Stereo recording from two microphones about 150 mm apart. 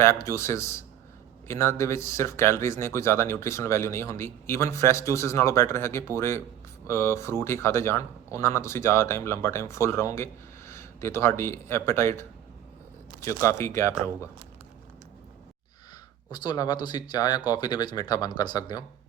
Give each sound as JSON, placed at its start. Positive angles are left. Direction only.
{"t": 0.0, "sound": "speech", "side_deg": 20}
{"t": 13.2, "sound": "speech", "side_deg": 20}
{"t": 16.3, "sound": "speech", "side_deg": 30}